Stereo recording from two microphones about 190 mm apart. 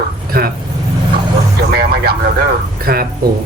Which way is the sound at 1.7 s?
55° right (ahead or behind).